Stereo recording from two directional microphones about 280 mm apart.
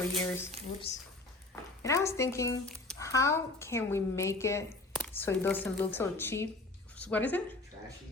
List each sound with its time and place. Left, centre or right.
0.1 s speech: centre
0.9 s a woman's voice: left
1.8 s speech: centre
6.9 s a sound: centre